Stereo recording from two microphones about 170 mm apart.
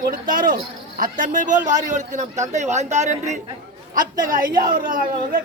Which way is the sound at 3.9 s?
55° right (ahead or behind).